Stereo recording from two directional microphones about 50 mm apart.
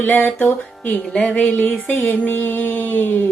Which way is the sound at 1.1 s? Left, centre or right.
Centre.